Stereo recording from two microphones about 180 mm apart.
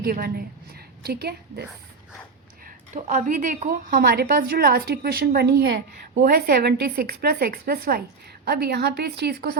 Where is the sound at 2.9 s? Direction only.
40° right (ahead or behind).